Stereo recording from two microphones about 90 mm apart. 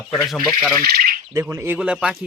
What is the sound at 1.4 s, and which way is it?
Speech, 25° right (ahead or behind).